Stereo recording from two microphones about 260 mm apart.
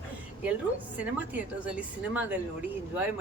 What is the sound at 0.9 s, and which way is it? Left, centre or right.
A woman's voice, centre.